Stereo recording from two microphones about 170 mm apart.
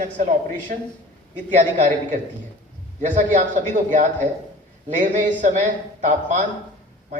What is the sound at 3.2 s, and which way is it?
A man's voice, 50° right (ahead or behind).